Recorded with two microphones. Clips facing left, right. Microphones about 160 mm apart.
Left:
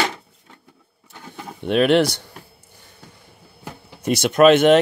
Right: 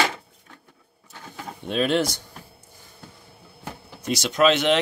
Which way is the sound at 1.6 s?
70° left (ahead or behind).